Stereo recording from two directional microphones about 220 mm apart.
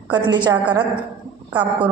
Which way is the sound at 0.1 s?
20° right (ahead or behind).